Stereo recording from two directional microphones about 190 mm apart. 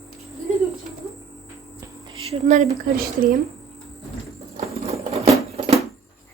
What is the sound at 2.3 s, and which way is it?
A woman's voice, 35° right (ahead or behind).